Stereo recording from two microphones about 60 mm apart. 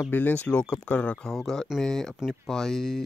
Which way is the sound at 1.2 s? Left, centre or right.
Centre.